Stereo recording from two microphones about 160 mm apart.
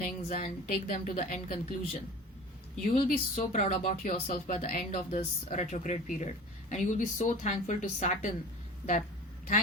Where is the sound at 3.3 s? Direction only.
45° left (ahead or behind).